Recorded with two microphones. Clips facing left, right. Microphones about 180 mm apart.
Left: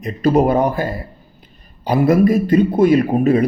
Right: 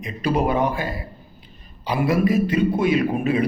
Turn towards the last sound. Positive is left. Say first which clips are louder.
# left 6 dB
turn(degrees=40)  # may be behind; listen again after turning